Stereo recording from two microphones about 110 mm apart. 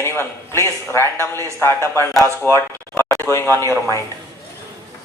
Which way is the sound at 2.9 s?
25° left (ahead or behind).